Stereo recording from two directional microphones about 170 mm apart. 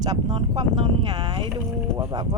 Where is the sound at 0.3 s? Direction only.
35° right (ahead or behind).